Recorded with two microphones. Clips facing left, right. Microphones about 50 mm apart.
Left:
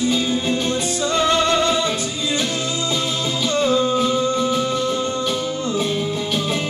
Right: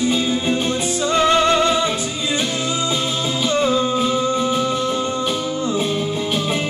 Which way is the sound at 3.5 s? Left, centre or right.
Centre.